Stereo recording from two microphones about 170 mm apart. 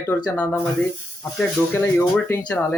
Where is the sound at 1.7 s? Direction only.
10° left (ahead or behind).